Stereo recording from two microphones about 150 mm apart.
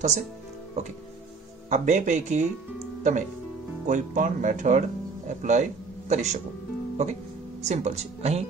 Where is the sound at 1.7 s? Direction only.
55° right (ahead or behind).